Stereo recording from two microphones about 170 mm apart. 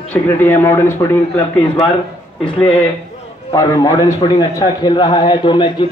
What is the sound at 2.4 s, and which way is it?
Speech, 5° left (ahead or behind).